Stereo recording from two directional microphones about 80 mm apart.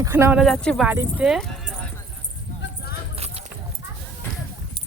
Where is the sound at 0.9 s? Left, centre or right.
Right.